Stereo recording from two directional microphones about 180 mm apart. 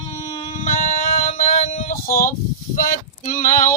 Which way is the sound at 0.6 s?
45° left (ahead or behind).